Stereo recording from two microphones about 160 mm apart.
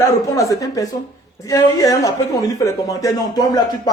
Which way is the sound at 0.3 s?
20° left (ahead or behind).